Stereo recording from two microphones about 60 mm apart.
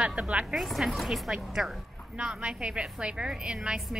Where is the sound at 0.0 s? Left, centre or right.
Right.